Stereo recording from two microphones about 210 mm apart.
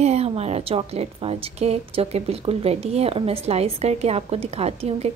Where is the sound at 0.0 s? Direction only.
30° right (ahead or behind).